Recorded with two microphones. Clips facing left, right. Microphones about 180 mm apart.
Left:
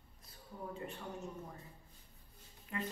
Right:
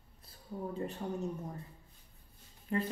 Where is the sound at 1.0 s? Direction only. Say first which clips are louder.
Right 8 dB; 40° right (ahead or behind).